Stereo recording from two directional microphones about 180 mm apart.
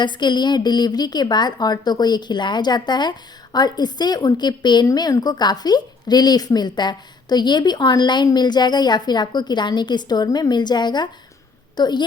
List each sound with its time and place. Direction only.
0.0 s a woman's voice: 25° left (ahead or behind)